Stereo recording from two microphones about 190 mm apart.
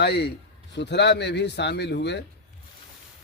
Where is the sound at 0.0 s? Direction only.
60° left (ahead or behind).